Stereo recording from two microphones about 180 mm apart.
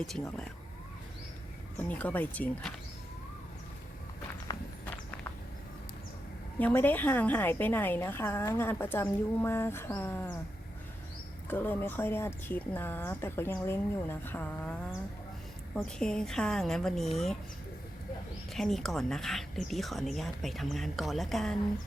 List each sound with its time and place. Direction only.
1.8 s a woman's voice: 10° left (ahead or behind)
4.5 s horse: 20° left (ahead or behind)
6.6 s a woman's voice: 10° left (ahead or behind)
11.4 s a woman's voice: 10° left (ahead or behind)
18.5 s speech: centre (ahead or behind)